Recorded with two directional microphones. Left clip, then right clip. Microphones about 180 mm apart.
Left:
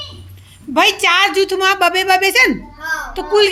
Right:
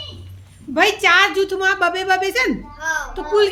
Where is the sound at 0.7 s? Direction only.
10° left (ahead or behind).